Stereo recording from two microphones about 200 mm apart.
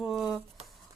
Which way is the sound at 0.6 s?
30° right (ahead or behind).